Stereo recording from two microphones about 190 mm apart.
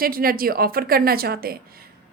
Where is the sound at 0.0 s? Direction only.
50° right (ahead or behind).